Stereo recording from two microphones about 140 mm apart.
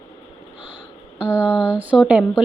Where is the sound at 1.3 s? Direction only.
15° left (ahead or behind).